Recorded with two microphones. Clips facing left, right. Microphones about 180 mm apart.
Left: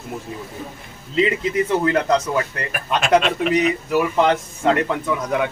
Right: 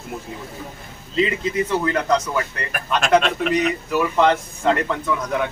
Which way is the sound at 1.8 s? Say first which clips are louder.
Left 2 dB; 25° left (ahead or behind).